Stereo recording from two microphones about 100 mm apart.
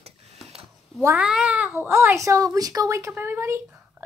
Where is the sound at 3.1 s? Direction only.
20° right (ahead or behind).